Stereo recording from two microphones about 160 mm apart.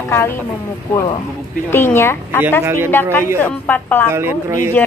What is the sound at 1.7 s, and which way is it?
Speech, 15° left (ahead or behind).